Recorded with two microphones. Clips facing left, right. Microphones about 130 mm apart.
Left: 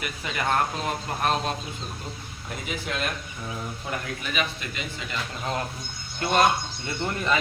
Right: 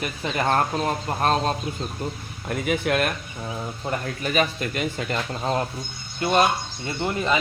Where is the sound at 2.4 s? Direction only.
60° right (ahead or behind).